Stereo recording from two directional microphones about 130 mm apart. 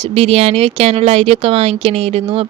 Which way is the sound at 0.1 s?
50° right (ahead or behind).